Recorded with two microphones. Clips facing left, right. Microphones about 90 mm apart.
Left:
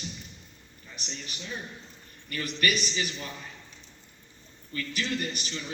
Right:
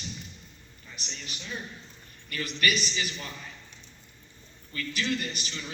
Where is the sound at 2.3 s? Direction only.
40° left (ahead or behind).